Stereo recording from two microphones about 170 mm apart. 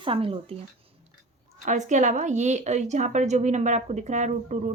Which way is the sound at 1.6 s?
45° right (ahead or behind).